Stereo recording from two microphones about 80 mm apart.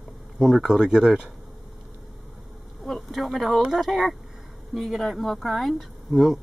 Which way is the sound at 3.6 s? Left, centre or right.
Centre.